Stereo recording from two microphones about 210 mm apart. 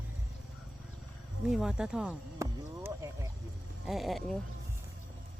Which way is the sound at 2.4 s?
15° right (ahead or behind).